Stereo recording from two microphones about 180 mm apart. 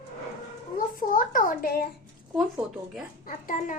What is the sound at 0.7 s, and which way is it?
A child's voice, 50° left (ahead or behind).